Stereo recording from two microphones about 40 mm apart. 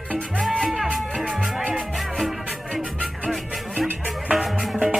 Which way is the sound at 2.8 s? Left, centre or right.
Right.